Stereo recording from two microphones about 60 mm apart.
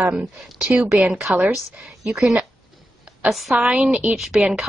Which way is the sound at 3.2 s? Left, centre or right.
Centre.